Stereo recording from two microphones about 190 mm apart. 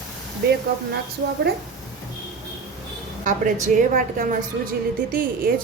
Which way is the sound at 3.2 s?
40° right (ahead or behind).